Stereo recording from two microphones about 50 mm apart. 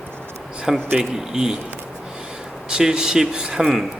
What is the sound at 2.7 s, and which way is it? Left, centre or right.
Speech, centre.